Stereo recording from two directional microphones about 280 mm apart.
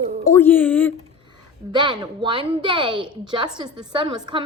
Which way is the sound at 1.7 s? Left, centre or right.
Centre.